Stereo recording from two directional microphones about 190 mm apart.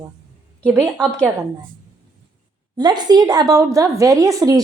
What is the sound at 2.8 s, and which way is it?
A woman's voice, 20° right (ahead or behind).